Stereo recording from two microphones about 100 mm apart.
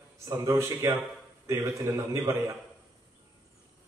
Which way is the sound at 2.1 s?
30° right (ahead or behind).